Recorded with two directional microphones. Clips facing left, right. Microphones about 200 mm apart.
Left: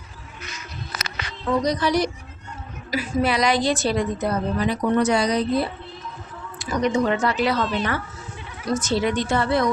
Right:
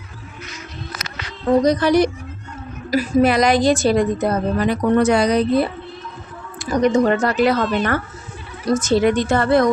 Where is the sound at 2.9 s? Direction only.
40° right (ahead or behind); by 5.7 s 55° right (ahead or behind).